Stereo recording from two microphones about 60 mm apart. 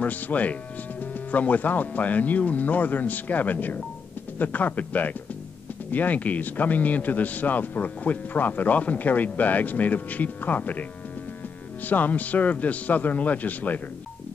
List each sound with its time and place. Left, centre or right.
0.0 s a man's voice: left